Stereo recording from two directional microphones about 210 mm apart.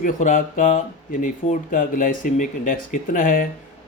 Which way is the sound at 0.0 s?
40° left (ahead or behind).